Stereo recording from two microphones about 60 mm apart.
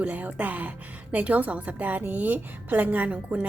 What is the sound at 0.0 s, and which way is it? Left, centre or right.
A woman's voice, right.